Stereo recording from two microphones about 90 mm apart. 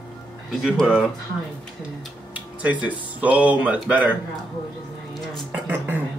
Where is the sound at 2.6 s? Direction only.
15° right (ahead or behind).